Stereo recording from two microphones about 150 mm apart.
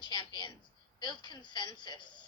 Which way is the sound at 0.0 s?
30° left (ahead or behind).